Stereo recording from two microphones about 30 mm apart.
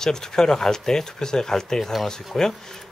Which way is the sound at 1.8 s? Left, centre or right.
Centre.